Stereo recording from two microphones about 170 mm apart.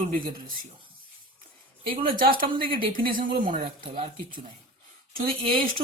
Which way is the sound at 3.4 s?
30° right (ahead or behind).